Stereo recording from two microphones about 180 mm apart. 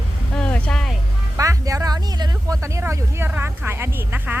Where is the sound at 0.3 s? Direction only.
5° left (ahead or behind).